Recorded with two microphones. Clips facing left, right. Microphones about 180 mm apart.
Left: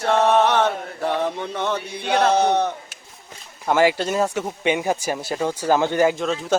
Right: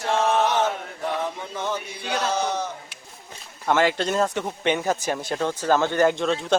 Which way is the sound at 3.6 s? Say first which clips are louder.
Left 3 dB; 10° left (ahead or behind).